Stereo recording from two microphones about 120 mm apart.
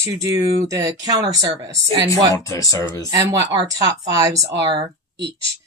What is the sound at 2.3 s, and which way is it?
Speech, 30° left (ahead or behind).